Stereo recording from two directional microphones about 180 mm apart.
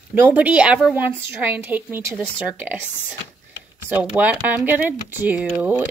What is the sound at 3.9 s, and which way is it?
Speech, 10° right (ahead or behind).